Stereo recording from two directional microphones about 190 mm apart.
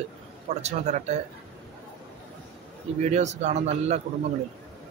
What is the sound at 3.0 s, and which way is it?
A man's voice, 35° right (ahead or behind).